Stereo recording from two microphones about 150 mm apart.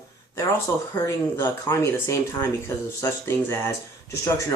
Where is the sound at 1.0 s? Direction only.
20° left (ahead or behind).